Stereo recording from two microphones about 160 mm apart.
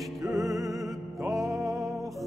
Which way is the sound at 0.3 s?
Centre (ahead or behind).